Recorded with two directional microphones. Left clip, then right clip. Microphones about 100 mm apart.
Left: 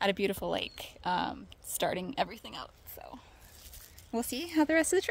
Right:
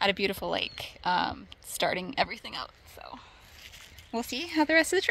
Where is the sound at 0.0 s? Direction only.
10° left (ahead or behind).